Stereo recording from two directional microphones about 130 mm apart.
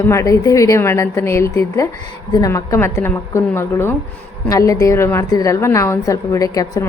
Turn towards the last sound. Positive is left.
turn(degrees=25)  # may be behind; listen again after turning